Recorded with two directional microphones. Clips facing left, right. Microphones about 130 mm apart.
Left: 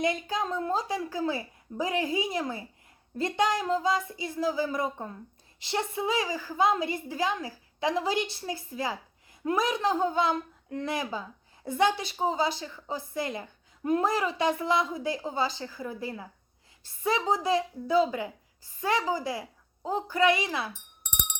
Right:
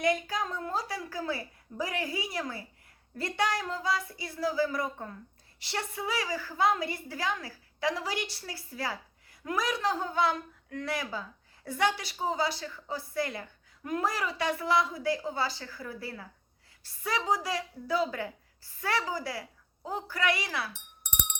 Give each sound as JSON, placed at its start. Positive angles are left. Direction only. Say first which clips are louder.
{"t": 0.0, "sound": "speech", "louder": "even", "side_deg": 25}